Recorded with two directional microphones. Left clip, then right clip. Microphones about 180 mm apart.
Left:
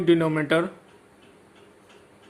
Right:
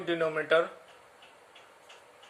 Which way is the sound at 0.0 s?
35° left (ahead or behind).